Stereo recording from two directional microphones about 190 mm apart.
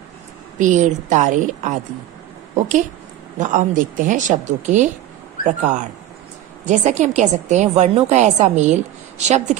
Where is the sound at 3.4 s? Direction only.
45° right (ahead or behind).